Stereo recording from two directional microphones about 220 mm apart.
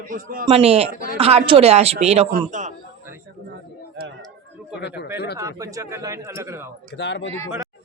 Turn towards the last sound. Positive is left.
turn(degrees=55)  # may be behind; listen again after turning